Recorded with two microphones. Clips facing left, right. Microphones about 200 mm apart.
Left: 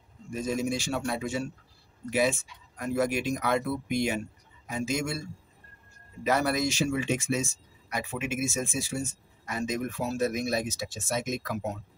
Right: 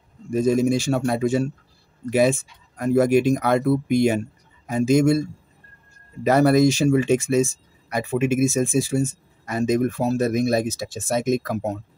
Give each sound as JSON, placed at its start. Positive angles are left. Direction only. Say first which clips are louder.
{"t": 0.3, "sound": "speech", "louder": "right 11 dB", "side_deg": -45}
{"t": 6.3, "sound": "speech", "louder": "right 11 dB", "side_deg": -40}